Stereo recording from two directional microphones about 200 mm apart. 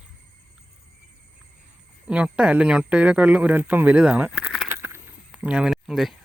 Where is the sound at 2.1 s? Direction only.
5° right (ahead or behind).